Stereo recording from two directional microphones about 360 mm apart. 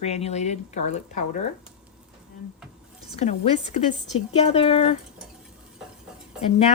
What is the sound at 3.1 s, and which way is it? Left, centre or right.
Speech, centre.